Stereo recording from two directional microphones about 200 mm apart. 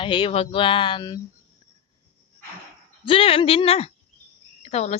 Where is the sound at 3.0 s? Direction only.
25° left (ahead or behind).